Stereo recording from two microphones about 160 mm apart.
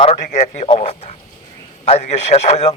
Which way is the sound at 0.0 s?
45° left (ahead or behind).